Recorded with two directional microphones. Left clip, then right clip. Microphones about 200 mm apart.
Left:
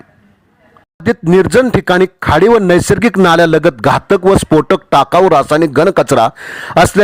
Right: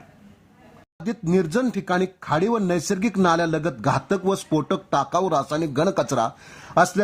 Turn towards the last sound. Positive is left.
turn(degrees=50)  # may be behind; listen again after turning